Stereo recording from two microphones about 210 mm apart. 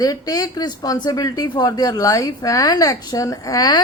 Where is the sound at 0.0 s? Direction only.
15° left (ahead or behind).